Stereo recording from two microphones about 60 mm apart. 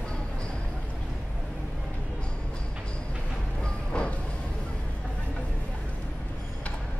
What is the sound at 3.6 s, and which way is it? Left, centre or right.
Music, centre.